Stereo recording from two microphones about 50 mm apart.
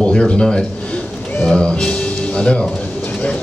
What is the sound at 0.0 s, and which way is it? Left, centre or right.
A man's voice, centre.